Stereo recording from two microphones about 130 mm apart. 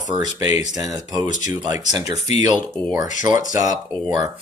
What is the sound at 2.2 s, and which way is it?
Speech, 60° left (ahead or behind).